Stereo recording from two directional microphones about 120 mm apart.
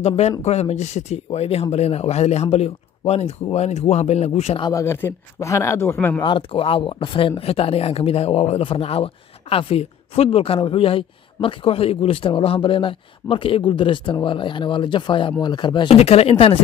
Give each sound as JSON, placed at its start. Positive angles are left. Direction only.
{"t": 0.0, "sound": "speech", "side_deg": 65}
{"t": 4.6, "sound": "speech", "side_deg": 25}
{"t": 6.2, "sound": "speech", "side_deg": 45}
{"t": 15.9, "sound": "speech", "side_deg": 60}